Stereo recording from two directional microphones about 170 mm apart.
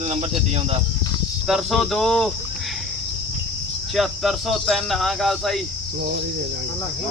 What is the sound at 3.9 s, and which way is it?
Speech, centre (ahead or behind).